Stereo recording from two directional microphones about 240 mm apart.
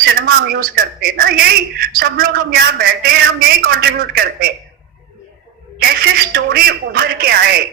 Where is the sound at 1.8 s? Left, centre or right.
Right.